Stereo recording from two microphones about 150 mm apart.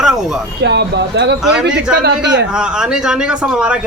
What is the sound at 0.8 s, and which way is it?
Speech, 90° right.